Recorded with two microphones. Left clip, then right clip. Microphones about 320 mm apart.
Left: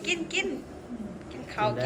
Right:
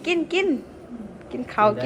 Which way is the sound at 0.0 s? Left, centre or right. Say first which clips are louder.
Right 6 dB; centre.